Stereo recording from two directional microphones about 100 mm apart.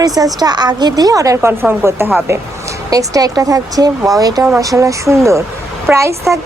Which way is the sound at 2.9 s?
40° right (ahead or behind).